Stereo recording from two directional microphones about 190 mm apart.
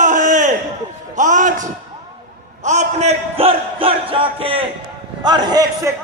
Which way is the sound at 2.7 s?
35° right (ahead or behind).